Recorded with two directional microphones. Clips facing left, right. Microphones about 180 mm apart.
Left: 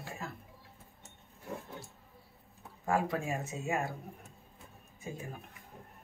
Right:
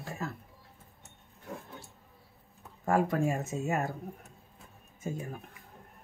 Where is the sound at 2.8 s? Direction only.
45° right (ahead or behind).